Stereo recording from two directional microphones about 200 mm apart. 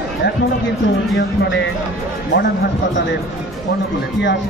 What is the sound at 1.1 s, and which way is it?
Speech, 60° left (ahead or behind).